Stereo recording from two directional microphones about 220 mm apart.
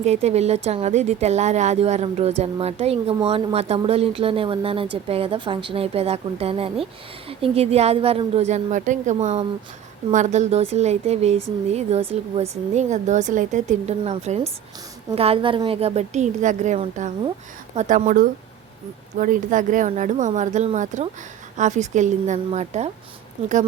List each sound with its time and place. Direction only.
0.0 s a woman's voice: 30° right (ahead or behind)